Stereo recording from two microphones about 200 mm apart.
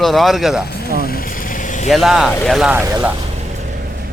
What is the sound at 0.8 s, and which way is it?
Vehicle, 50° left (ahead or behind).